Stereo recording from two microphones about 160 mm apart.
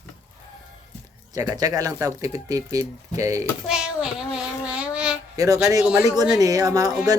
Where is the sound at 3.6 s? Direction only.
5° right (ahead or behind).